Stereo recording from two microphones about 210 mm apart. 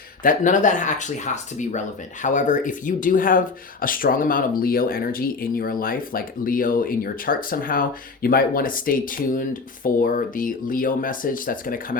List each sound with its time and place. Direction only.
0.2 s speech: 40° left (ahead or behind)